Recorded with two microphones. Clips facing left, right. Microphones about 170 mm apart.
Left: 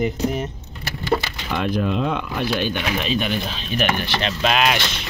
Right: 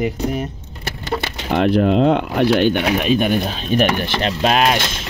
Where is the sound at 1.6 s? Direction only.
70° right (ahead or behind); by 5.0 s 45° right (ahead or behind).